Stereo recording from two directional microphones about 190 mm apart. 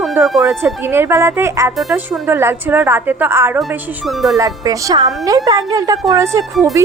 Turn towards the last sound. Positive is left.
turn(degrees=-15)  # may be behind; listen again after turning